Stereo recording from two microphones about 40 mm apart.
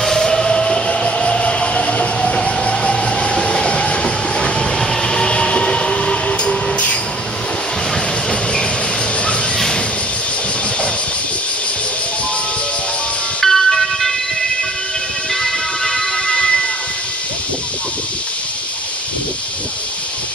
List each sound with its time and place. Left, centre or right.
0.0 s train: centre; by 7.0 s left
13.4 s music: centre
15.8 s music: left